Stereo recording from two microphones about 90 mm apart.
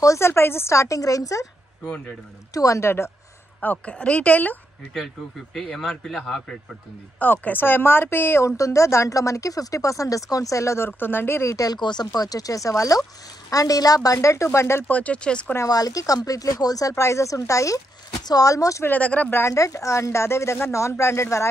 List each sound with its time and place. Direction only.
0.0 s speech: 30° left (ahead or behind)
2.5 s speech: 35° left (ahead or behind)
3.6 s speech: 15° left (ahead or behind)
4.9 s speech: centre (ahead or behind)
7.2 s speech: 20° left (ahead or behind)
14.9 s speech: 15° left (ahead or behind)
15.5 s speech: 40° left (ahead or behind)
18.9 s speech: 15° left (ahead or behind)
19.4 s speech: 35° left (ahead or behind)